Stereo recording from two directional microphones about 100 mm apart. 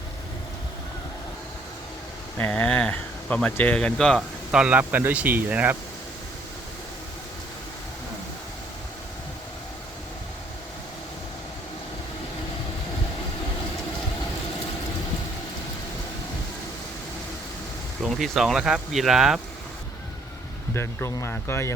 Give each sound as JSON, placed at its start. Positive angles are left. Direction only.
{"t": 2.4, "sound": "speech", "side_deg": 15}
{"t": 4.5, "sound": "speech", "side_deg": -10}
{"t": 18.0, "sound": "speech", "side_deg": 0}
{"t": 20.7, "sound": "speech", "side_deg": 25}